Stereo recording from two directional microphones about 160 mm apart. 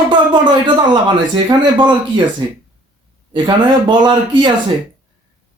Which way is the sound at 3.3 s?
30° right (ahead or behind).